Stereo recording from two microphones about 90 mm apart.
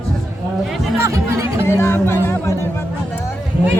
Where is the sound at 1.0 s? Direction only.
35° right (ahead or behind).